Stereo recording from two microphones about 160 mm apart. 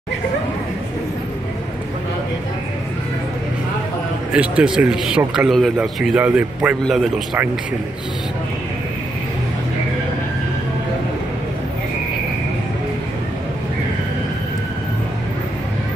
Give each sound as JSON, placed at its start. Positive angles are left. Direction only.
{"t": 4.3, "sound": "a man's voice", "side_deg": -5}